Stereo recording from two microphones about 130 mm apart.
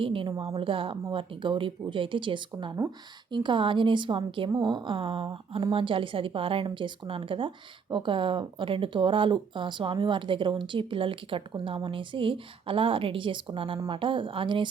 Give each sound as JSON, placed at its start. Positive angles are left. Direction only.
{"t": 0.0, "sound": "a woman's voice", "side_deg": -40}